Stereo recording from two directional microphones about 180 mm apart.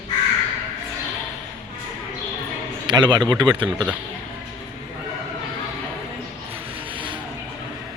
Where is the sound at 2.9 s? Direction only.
25° right (ahead or behind).